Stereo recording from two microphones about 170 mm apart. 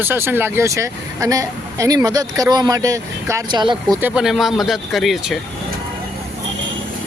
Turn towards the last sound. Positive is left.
turn(degrees=0)  # may be behind; listen again after turning